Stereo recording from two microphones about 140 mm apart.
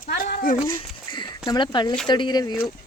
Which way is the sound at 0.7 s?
35° left (ahead or behind).